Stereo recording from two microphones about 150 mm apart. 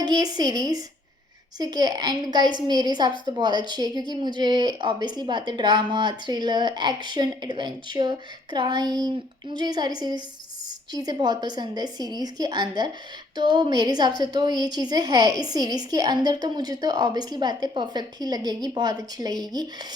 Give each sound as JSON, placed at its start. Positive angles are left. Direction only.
{"t": 0.0, "sound": "a woman's voice", "side_deg": -25}